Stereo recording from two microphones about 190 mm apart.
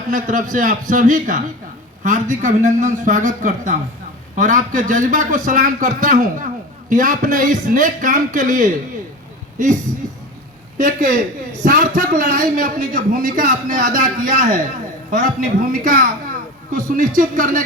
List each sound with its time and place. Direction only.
0.1 s a man's voice: 45° right (ahead or behind)
10.8 s a man's voice: 45° right (ahead or behind)